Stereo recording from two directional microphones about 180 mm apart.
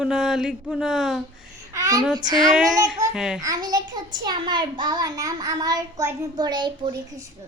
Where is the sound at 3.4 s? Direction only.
20° right (ahead or behind).